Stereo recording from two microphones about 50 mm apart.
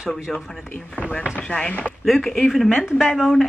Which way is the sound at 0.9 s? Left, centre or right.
Left.